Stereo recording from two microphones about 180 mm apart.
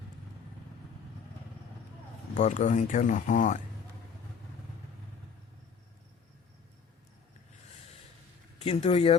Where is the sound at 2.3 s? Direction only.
40° left (ahead or behind).